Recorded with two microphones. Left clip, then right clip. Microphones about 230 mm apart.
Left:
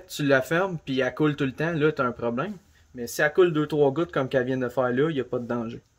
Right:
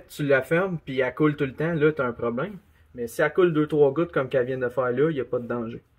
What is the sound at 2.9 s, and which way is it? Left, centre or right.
Speech, left.